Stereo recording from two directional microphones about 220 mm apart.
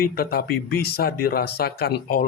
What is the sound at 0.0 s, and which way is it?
A man's voice, 45° left (ahead or behind).